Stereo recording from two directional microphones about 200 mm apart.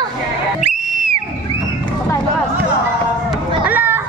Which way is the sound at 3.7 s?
10° right (ahead or behind).